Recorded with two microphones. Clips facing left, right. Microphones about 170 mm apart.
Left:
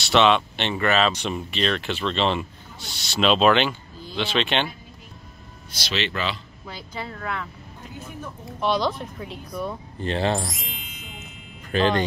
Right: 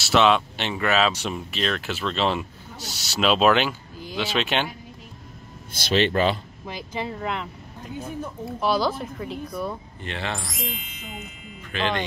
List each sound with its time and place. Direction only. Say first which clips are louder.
0.0 s speech: even; 5° right (ahead or behind)
5.7 s speech: right 7 dB; 50° right (ahead or behind)
6.6 s speech: right 2 dB; 20° right (ahead or behind)
8.5 s speech: even; 5° right (ahead or behind)
10.0 s speech: left 8 dB; 35° left (ahead or behind)
10.4 s music: right 1 dB; centre (ahead or behind)
11.7 s speech: left 5 dB; 40° left (ahead or behind)